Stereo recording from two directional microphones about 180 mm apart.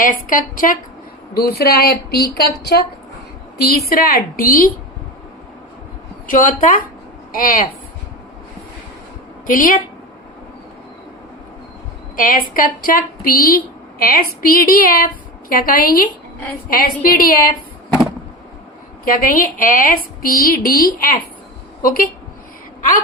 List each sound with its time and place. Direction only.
0.0 s a woman's voice: 50° left (ahead or behind)
1.3 s a woman's voice: 60° left (ahead or behind)
3.8 s a woman's voice: 55° left (ahead or behind)
6.2 s a woman's voice: 50° left (ahead or behind)
9.5 s a woman's voice: 50° left (ahead or behind)
12.1 s a woman's voice: 50° left (ahead or behind)
19.0 s a woman's voice: 50° left (ahead or behind)